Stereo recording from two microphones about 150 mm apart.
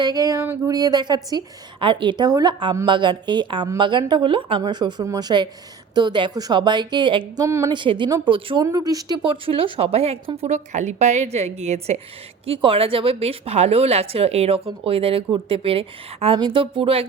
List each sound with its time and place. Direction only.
0.0 s a woman's voice: 25° right (ahead or behind)
7.4 s a woman's voice: 20° right (ahead or behind)
7.7 s a woman's voice: 30° right (ahead or behind)
8.6 s a woman's voice: 25° right (ahead or behind)